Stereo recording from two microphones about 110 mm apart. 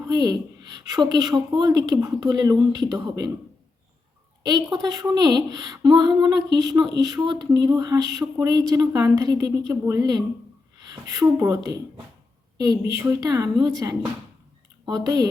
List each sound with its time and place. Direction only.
0.0 s speech: 35° right (ahead or behind)
4.4 s speech: 40° right (ahead or behind)